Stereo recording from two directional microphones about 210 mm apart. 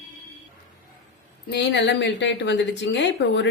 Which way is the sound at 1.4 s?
55° left (ahead or behind).